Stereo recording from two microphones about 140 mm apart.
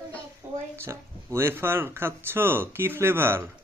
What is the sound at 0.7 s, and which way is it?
Speech, 20° right (ahead or behind).